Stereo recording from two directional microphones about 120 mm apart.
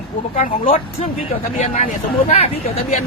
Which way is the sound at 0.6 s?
55° left (ahead or behind).